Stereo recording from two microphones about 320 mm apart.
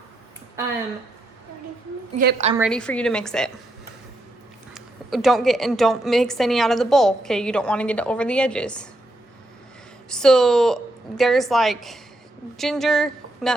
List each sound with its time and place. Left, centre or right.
2.1 s a woman's voice: right
2.6 s a woman's voice: centre
4.7 s a woman's voice: centre
10.1 s a woman's voice: centre